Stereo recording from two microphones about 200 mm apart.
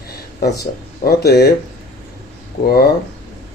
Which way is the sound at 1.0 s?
55° left (ahead or behind).